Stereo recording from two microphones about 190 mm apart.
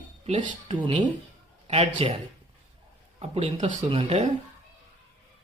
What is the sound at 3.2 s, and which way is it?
Speech, 35° right (ahead or behind).